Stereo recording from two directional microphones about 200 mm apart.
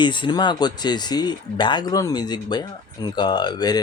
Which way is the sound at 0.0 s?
25° left (ahead or behind).